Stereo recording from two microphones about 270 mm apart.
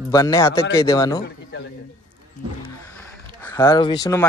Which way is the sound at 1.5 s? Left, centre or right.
Left.